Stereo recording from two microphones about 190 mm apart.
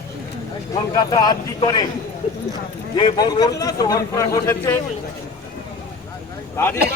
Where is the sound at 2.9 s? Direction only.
25° left (ahead or behind).